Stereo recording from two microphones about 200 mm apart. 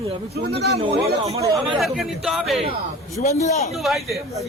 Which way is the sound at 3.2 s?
35° left (ahead or behind).